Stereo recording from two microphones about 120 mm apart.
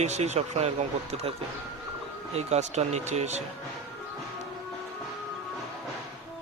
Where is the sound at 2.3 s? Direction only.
65° right (ahead or behind).